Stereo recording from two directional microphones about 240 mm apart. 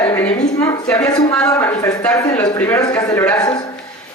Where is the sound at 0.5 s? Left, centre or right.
Centre.